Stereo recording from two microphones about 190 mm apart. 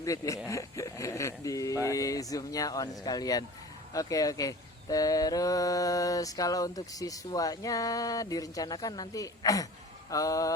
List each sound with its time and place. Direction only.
0.0 s speech: 15° left (ahead or behind)